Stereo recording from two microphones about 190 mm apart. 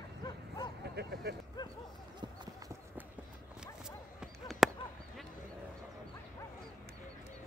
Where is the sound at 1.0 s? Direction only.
60° right (ahead or behind).